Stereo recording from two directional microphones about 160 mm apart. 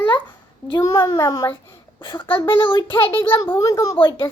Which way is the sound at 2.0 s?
30° left (ahead or behind).